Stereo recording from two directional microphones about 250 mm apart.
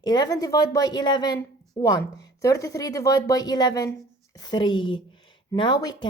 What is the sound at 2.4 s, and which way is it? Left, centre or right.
A woman's voice, centre.